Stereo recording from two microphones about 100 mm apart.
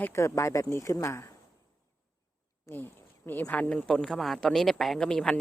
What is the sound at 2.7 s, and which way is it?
A woman's voice, 25° left (ahead or behind).